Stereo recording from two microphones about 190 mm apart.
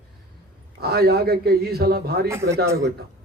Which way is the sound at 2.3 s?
15° right (ahead or behind).